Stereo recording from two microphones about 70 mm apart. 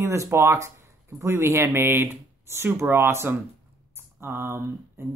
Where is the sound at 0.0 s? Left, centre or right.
Right.